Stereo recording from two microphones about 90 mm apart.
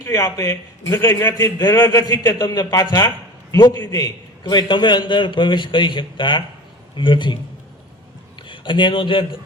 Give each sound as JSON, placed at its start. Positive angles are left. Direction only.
{"t": 0.0, "sound": "a man's voice", "side_deg": 35}
{"t": 8.4, "sound": "speech", "side_deg": 60}